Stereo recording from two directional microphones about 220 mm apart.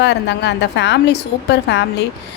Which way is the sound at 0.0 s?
50° left (ahead or behind).